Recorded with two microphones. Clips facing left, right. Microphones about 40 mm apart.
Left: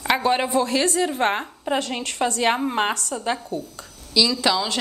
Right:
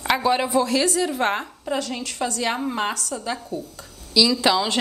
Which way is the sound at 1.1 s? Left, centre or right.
Centre.